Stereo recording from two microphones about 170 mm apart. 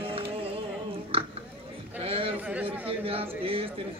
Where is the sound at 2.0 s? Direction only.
35° right (ahead or behind).